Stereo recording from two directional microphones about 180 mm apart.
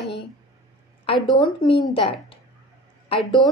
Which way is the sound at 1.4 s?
25° left (ahead or behind).